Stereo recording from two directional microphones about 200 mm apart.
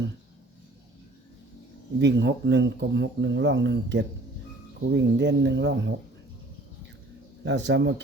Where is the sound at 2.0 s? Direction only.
60° right (ahead or behind).